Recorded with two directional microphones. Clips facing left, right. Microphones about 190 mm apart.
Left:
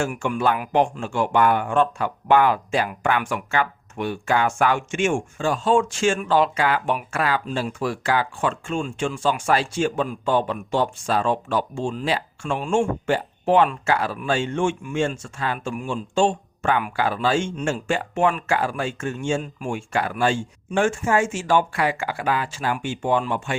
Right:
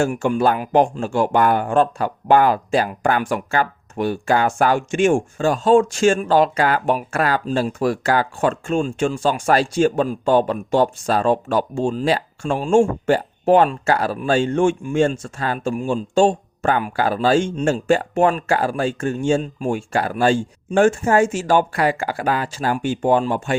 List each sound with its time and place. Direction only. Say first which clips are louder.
0.0 s speech: right 5 dB; 35° right (ahead or behind)